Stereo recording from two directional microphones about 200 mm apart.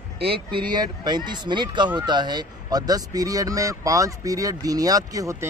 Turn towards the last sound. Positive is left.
turn(degrees=-15)  # may be behind; listen again after turning